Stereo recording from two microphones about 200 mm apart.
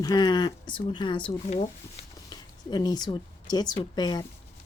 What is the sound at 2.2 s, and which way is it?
A woman's voice, 20° left (ahead or behind).